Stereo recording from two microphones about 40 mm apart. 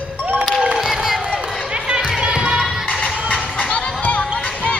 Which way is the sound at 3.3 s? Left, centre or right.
Left.